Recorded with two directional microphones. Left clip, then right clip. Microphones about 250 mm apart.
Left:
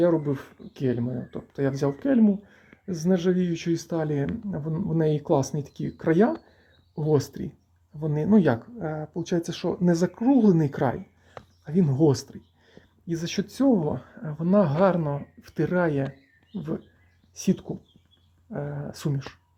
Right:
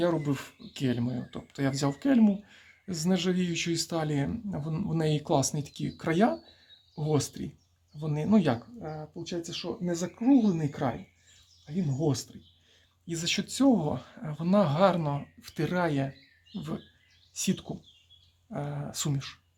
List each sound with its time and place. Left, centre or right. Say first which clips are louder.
0.0 s speech: left 6 dB; centre
8.8 s speech: left 8 dB; left
13.1 s speech: left 1 dB; centre